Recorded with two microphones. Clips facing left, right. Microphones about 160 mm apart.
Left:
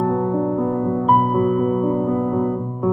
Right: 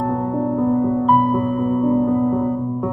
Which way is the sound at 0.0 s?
5° right (ahead or behind).